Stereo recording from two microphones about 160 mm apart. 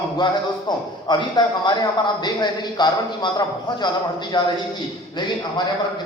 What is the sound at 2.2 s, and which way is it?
A man's voice, 25° left (ahead or behind).